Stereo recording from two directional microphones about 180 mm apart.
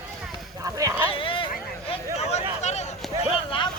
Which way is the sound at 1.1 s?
30° left (ahead or behind).